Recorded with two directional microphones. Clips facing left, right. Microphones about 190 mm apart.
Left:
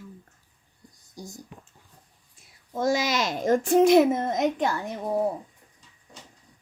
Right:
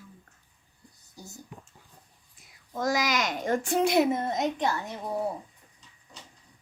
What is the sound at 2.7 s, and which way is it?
Speech, 25° left (ahead or behind).